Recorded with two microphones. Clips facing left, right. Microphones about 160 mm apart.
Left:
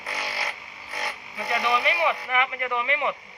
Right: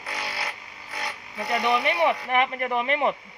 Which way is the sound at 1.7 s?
45° right (ahead or behind).